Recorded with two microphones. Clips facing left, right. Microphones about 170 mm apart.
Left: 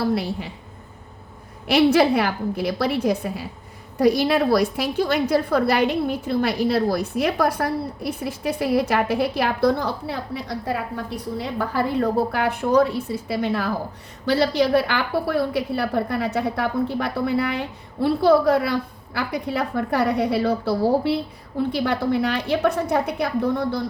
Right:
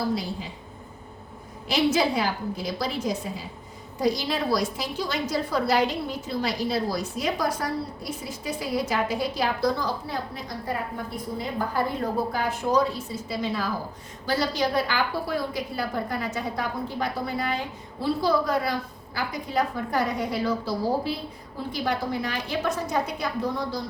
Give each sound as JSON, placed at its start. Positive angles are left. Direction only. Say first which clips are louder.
{"t": 0.0, "sound": "a woman's voice", "louder": "left 5 dB", "side_deg": 65}
{"t": 1.6, "sound": "a woman's voice", "louder": "left 6 dB", "side_deg": 60}